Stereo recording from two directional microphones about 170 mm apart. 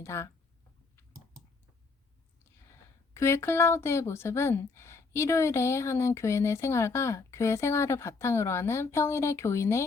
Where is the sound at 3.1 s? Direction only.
15° left (ahead or behind).